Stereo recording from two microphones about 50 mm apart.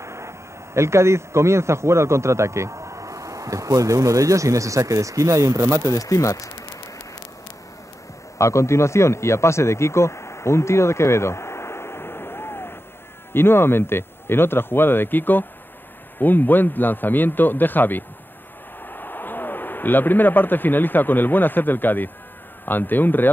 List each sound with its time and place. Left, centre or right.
0.0 s a man's voice: right
6.0 s speech: left
8.4 s a man's voice: left